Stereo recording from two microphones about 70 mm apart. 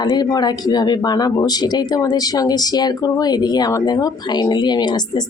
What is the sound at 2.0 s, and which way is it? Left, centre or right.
A woman's voice, left.